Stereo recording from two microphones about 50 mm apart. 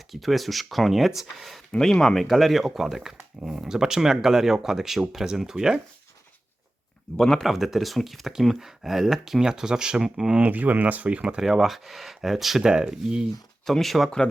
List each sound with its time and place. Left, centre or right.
0.1 s speech: centre
1.7 s speech: centre
7.2 s speech: centre
7.4 s speech: centre
10.3 s speech: right
11.3 s speech: centre
12.6 s speech: centre
13.7 s speech: centre